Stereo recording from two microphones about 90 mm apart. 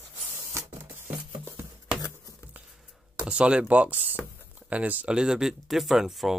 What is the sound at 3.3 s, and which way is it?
Speech, 10° right (ahead or behind).